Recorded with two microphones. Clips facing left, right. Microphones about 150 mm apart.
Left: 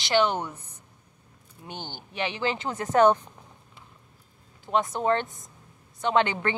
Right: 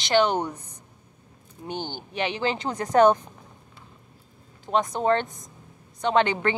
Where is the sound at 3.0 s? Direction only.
15° right (ahead or behind).